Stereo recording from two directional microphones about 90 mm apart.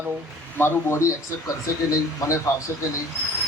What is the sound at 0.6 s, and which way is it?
A man's voice, 30° left (ahead or behind).